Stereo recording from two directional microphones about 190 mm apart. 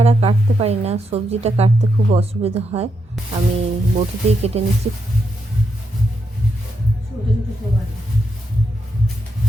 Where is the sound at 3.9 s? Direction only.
35° right (ahead or behind).